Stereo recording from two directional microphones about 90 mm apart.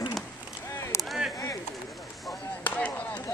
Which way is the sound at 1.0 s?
Centre (ahead or behind).